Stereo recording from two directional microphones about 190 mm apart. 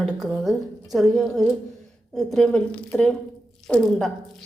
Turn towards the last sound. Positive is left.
turn(degrees=5)  # may be behind; listen again after turning